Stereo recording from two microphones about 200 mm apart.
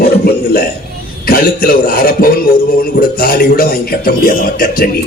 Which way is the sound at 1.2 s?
45° left (ahead or behind).